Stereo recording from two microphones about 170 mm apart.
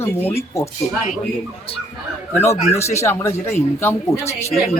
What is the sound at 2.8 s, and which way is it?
Speech, 15° left (ahead or behind).